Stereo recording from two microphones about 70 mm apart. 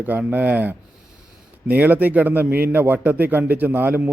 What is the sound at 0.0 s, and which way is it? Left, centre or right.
A man's voice, right.